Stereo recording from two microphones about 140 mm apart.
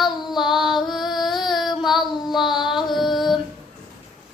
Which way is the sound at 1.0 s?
30° left (ahead or behind).